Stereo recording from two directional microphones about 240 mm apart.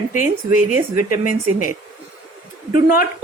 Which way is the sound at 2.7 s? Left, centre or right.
Left.